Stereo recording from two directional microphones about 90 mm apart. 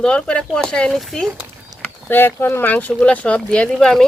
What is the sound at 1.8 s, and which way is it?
Speech, 25° left (ahead or behind).